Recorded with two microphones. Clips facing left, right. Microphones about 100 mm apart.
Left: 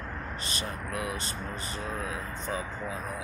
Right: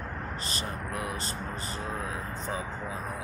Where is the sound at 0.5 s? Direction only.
35° right (ahead or behind).